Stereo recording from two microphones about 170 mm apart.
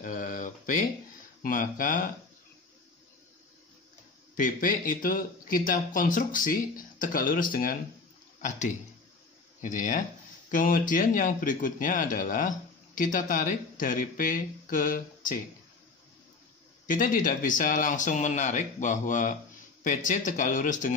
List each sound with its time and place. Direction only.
0.0 s a sound: 50° left (ahead or behind)
1.4 s a man's voice: 50° left (ahead or behind)
4.4 s a man's voice: 50° left (ahead or behind)
16.8 s a man's voice: 50° left (ahead or behind)